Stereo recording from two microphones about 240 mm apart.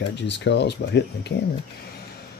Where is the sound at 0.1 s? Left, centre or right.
Left.